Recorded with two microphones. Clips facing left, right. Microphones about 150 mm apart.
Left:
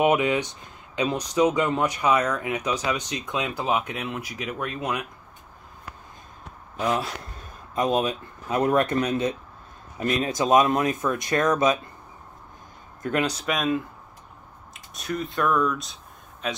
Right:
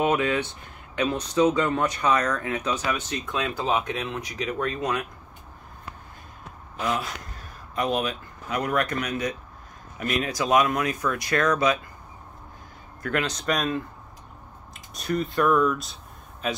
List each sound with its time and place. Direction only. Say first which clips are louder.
0.0 s speech: left 2 dB; 15° left (ahead or behind)
7.7 s speech: left 3 dB; 20° left (ahead or behind)
13.0 s speech: left 2 dB; 20° left (ahead or behind)
13.3 s speech: left 1 dB; 5° left (ahead or behind)
14.7 s a sound: right 3 dB; centre (ahead or behind)